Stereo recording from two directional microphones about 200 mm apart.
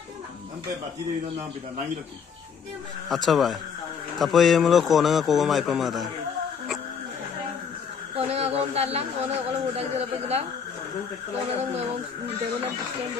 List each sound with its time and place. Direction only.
3.1 s a man's voice: centre (ahead or behind)
8.2 s speech: 30° right (ahead or behind)